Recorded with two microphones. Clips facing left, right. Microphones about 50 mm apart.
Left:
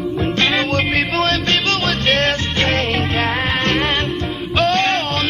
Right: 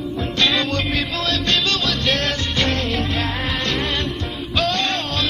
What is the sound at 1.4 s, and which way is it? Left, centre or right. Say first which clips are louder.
Music: left 3 dB; left.